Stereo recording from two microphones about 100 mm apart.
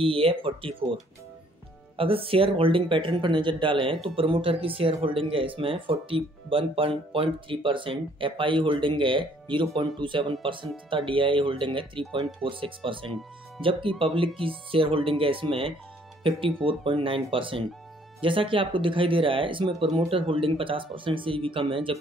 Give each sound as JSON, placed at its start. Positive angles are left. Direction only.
{"t": 0.0, "sound": "speech", "side_deg": -70}
{"t": 2.0, "sound": "speech", "side_deg": -65}